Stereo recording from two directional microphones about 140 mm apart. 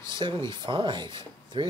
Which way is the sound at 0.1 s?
35° right (ahead or behind).